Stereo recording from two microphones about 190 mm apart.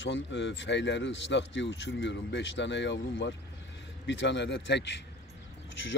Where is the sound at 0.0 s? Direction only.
75° left (ahead or behind).